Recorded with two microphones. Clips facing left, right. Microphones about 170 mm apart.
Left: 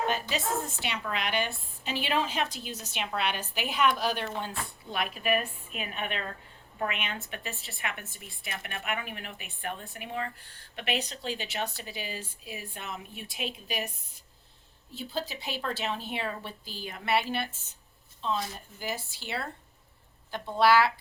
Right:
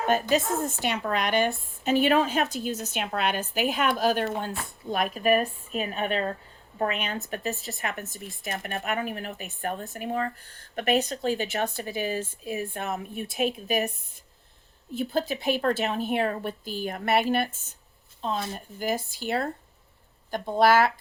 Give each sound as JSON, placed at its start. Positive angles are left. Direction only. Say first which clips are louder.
{"t": 0.0, "sound": "speech", "louder": "right 7 dB", "side_deg": -45}
{"t": 14.9, "sound": "speech", "louder": "right 8 dB", "side_deg": -50}